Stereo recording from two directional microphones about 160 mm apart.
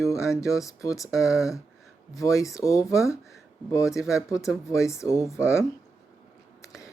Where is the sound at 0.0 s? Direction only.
20° left (ahead or behind).